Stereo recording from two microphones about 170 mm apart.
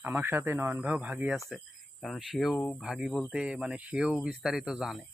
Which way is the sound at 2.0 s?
Centre (ahead or behind).